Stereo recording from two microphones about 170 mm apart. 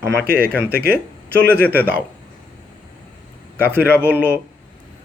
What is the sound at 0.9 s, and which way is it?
Speech, 10° right (ahead or behind).